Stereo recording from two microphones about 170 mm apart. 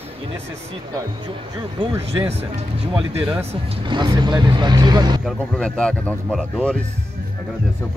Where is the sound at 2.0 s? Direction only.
35° right (ahead or behind).